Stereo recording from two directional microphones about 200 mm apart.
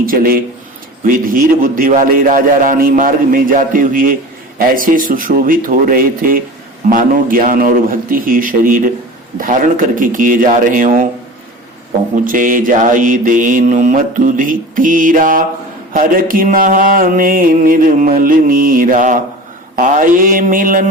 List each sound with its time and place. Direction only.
0.0 s mantra: 45° right (ahead or behind)
12.2 s mantra: 40° right (ahead or behind)